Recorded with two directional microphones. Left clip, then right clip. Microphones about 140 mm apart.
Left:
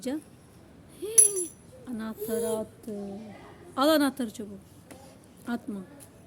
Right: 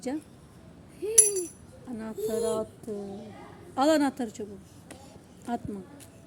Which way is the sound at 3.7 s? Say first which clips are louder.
Even; 20° left (ahead or behind).